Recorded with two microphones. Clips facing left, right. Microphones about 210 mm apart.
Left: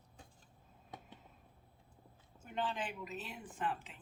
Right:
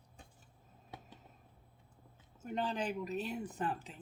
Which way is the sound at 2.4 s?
40° right (ahead or behind).